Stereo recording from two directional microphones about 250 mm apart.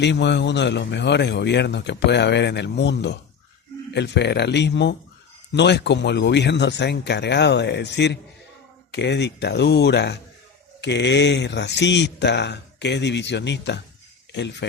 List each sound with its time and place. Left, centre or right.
0.0 s a man's voice: left